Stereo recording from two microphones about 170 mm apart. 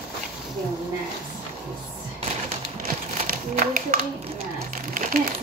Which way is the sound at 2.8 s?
55° right (ahead or behind).